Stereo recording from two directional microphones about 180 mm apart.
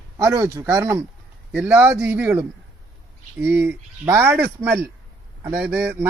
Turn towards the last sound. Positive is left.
turn(degrees=-10)  # may be behind; listen again after turning